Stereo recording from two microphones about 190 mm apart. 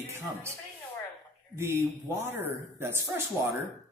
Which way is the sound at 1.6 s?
15° right (ahead or behind).